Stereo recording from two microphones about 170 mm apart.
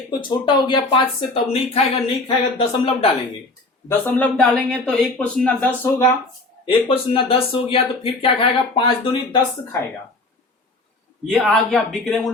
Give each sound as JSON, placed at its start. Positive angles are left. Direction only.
{"t": 0.2, "sound": "speech", "side_deg": 25}
{"t": 3.8, "sound": "speech", "side_deg": 10}
{"t": 6.7, "sound": "speech", "side_deg": 30}
{"t": 11.3, "sound": "speech", "side_deg": 0}